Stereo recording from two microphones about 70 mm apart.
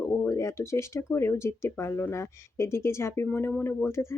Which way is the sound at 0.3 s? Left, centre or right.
Left.